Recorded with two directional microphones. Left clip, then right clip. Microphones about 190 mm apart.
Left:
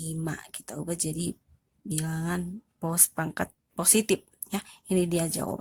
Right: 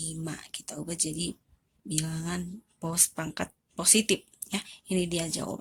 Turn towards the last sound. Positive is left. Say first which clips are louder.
# left 3 dB
turn(degrees=35)  # may be behind; listen again after turning